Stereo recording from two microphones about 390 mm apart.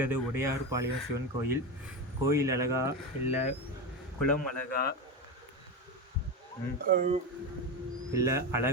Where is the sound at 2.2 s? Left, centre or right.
Centre.